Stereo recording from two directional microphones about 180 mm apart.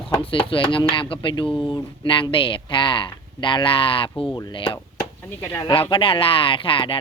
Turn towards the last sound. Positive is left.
turn(degrees=30)  # may be behind; listen again after turning